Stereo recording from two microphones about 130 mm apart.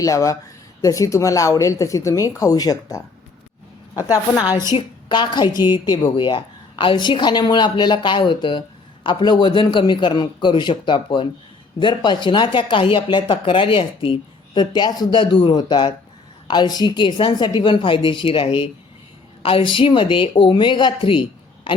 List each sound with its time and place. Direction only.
0.0 s speech: 25° left (ahead or behind)
4.8 s speech: 35° left (ahead or behind)